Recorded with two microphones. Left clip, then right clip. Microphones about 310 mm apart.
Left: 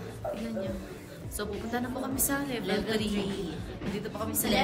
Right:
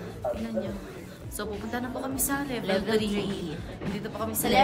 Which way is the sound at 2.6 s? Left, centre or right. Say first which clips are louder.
Right 6 dB; centre.